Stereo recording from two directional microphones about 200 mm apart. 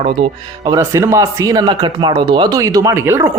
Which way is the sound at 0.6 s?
15° right (ahead or behind).